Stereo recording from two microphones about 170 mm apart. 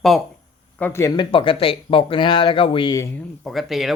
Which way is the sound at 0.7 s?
10° left (ahead or behind).